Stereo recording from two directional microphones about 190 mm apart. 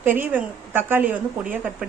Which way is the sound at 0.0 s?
10° right (ahead or behind).